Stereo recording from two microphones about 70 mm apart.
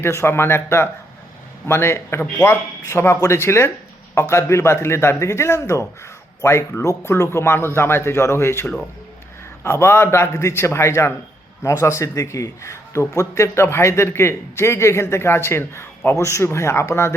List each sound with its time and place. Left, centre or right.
0.0 s a man's voice: left
9.6 s a man's voice: left